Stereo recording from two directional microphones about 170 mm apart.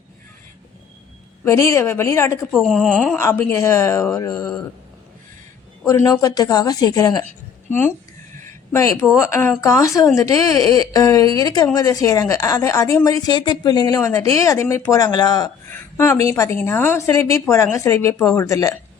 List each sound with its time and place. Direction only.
1.5 s a woman's voice: 20° left (ahead or behind)
2.5 s a woman's voice: centre (ahead or behind)
3.2 s a woman's voice: 15° left (ahead or behind)
5.8 s a woman's voice: 20° left (ahead or behind)